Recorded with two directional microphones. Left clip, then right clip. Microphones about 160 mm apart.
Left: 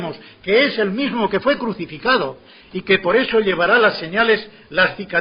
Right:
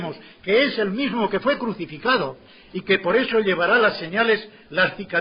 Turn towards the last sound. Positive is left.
turn(degrees=-30)  # may be behind; listen again after turning